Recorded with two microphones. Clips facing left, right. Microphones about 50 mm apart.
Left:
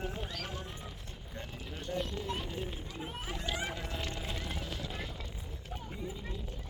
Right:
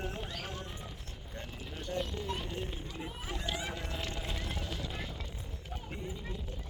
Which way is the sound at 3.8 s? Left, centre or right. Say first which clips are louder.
Even; centre.